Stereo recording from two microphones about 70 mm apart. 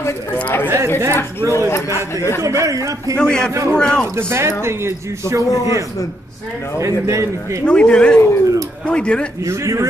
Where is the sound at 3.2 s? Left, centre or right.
Centre.